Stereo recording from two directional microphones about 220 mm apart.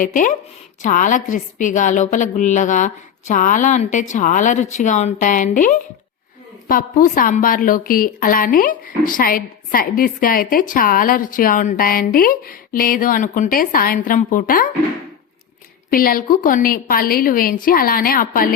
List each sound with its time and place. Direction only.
0.0 s a woman's voice: 35° left (ahead or behind)
15.9 s a woman's voice: 40° left (ahead or behind)